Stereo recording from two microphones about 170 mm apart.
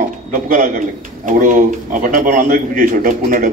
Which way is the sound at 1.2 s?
50° right (ahead or behind).